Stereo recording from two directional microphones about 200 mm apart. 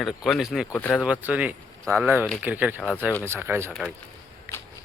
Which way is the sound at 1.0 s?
5° right (ahead or behind).